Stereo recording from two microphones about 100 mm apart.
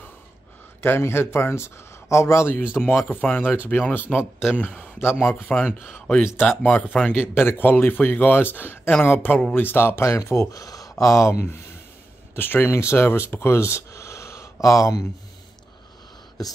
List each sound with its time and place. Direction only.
0.7 s speech: 25° left (ahead or behind)
2.6 s speech: 10° right (ahead or behind)
3.1 s speech: 20° left (ahead or behind)
12.4 s speech: 20° left (ahead or behind)